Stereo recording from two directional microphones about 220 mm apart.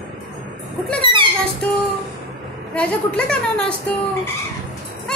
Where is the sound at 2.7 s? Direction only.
5° left (ahead or behind).